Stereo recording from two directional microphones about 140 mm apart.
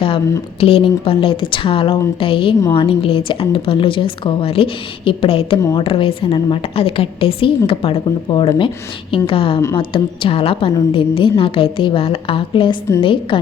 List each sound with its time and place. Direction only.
0.6 s a woman's voice: 40° left (ahead or behind)